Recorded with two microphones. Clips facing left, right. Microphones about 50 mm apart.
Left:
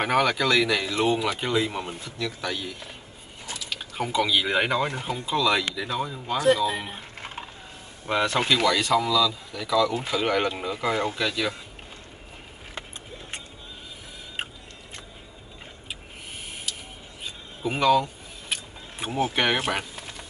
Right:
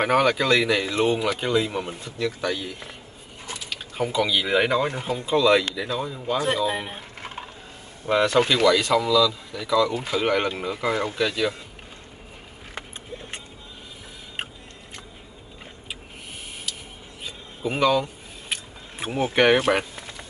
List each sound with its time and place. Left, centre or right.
0.0 s speech: centre
0.4 s speech: right
1.1 s speech: centre
1.9 s speech: centre
3.9 s speech: centre
6.3 s speech: right
7.2 s a sound: centre
8.1 s speech: centre
9.0 s speech: centre
9.5 s speech: centre
17.2 s a sound: centre
19.0 s speech: right